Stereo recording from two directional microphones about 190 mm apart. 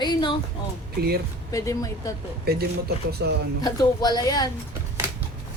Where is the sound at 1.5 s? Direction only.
15° left (ahead or behind).